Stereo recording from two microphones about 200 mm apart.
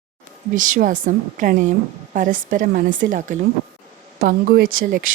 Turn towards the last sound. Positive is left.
turn(degrees=-45)  # may be behind; listen again after turning